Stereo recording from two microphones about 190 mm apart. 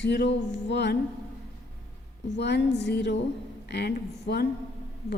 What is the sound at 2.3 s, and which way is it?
A woman's voice, 65° left (ahead or behind).